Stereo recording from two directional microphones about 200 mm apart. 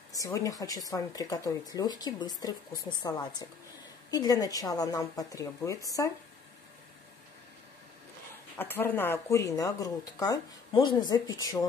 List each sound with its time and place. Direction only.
0.1 s speech: 15° left (ahead or behind)
8.5 s speech: 10° left (ahead or behind)